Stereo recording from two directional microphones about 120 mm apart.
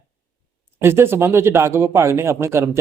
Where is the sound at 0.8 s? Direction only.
20° right (ahead or behind).